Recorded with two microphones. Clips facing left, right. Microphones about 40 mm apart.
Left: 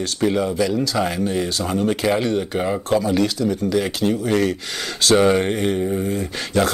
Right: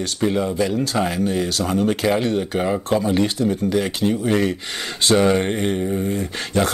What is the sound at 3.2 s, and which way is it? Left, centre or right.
Speech, right.